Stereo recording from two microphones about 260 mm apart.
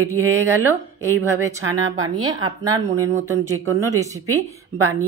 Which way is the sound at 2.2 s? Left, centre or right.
Centre.